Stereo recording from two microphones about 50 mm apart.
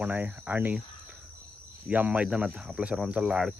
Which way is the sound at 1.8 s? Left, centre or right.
Right.